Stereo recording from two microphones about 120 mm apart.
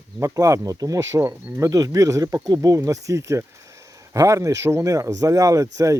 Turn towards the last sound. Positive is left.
turn(degrees=-25)  # may be behind; listen again after turning